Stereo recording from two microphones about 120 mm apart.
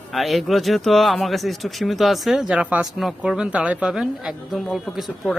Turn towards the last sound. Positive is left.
turn(degrees=0)  # may be behind; listen again after turning